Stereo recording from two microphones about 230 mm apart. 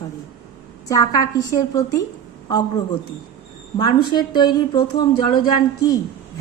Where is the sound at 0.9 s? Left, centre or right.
Centre.